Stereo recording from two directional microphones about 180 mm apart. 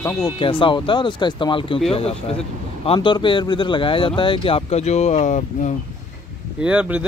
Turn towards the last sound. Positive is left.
turn(degrees=-5)  # may be behind; listen again after turning